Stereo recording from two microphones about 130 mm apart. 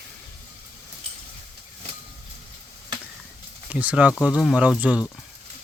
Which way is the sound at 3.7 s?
10° right (ahead or behind).